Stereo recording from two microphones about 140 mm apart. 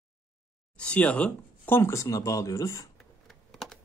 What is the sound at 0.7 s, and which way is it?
Speech, 10° left (ahead or behind).